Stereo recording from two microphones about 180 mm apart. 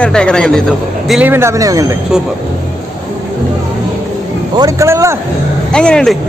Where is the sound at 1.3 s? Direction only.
15° right (ahead or behind).